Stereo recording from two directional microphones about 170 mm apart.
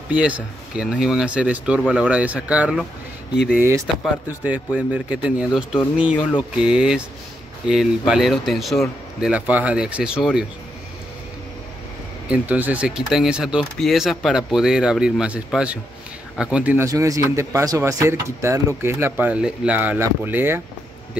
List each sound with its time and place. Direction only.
0.1 s speech: 5° right (ahead or behind)
3.5 s speech: 15° right (ahead or behind)
12.3 s speech: 10° right (ahead or behind)